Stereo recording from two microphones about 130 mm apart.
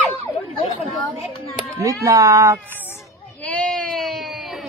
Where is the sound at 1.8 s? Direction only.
25° right (ahead or behind).